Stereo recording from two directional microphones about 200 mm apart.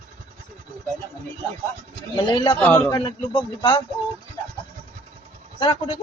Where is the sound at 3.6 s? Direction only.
25° left (ahead or behind).